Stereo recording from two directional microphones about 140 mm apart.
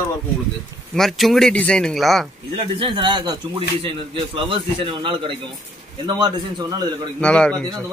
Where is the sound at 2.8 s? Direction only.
35° right (ahead or behind).